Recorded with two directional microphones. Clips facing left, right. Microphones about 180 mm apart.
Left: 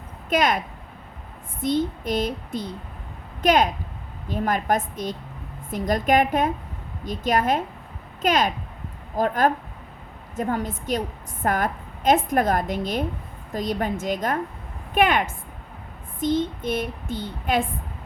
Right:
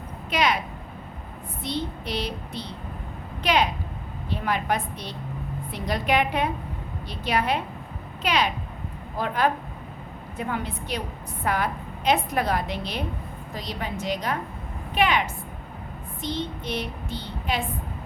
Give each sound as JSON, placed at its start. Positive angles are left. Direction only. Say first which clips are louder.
{"t": 0.3, "sound": "a woman's voice", "louder": "left 3 dB", "side_deg": 50}
{"t": 1.6, "sound": "a woman's voice", "louder": "left 7 dB", "side_deg": 45}